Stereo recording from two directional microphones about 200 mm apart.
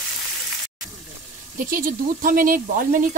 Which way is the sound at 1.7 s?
45° right (ahead or behind).